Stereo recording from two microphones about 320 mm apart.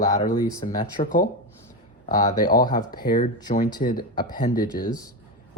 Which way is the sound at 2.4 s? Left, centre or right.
Left.